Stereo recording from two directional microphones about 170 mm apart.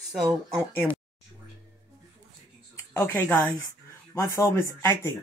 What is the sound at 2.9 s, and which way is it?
Speech, 15° left (ahead or behind).